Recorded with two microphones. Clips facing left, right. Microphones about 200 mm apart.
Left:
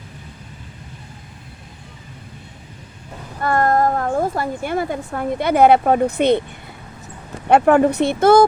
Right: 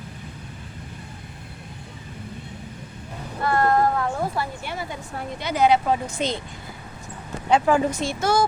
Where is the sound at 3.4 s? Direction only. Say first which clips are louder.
Left 3 dB; 45° left (ahead or behind).